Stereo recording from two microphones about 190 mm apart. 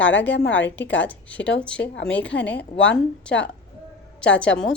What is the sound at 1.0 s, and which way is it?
Speech, 10° left (ahead or behind).